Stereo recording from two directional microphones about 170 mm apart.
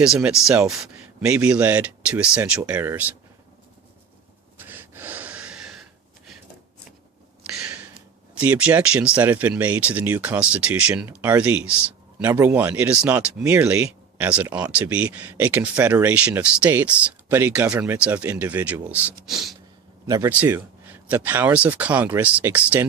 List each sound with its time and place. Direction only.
0.0 s speech: 5° right (ahead or behind)
4.5 s gasp: 10° right (ahead or behind)
8.4 s speech: 10° right (ahead or behind)
19.2 s gasp: centre (ahead or behind)
20.1 s speech: 20° right (ahead or behind)
20.3 s speech: 10° right (ahead or behind)